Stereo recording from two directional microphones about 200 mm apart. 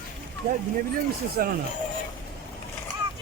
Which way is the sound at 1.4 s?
45° right (ahead or behind).